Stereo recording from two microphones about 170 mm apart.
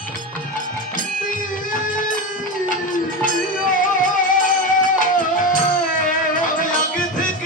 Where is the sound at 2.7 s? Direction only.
50° left (ahead or behind).